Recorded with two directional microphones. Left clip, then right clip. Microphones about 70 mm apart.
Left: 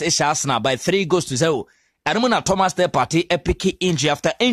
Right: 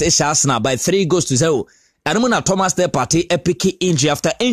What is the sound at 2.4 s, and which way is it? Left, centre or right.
Speech, right.